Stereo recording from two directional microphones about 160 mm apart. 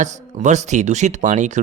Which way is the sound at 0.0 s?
50° right (ahead or behind).